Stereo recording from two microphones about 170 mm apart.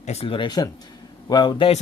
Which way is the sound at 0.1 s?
35° left (ahead or behind).